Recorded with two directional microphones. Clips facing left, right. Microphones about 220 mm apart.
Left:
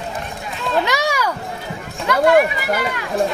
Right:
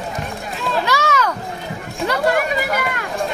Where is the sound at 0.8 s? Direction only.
15° left (ahead or behind).